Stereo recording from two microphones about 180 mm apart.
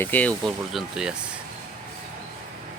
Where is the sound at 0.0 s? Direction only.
10° left (ahead or behind).